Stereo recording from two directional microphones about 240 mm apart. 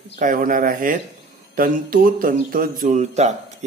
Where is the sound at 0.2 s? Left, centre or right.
Right.